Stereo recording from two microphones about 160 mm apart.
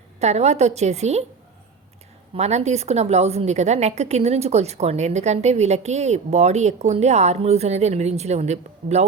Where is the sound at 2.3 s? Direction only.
45° right (ahead or behind).